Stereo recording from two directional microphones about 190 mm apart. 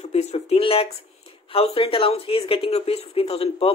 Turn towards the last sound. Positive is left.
turn(degrees=30)  # may be behind; listen again after turning